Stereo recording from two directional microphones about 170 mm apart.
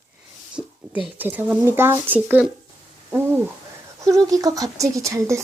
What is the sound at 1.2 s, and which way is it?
Speech, 10° right (ahead or behind).